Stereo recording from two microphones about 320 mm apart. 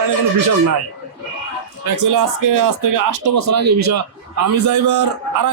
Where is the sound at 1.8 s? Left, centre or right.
Right.